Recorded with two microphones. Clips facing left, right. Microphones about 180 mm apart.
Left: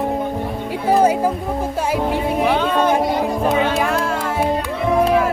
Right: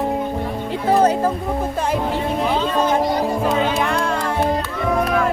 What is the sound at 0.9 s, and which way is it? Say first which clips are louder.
Speech: left 1 dB; 10° left (ahead or behind).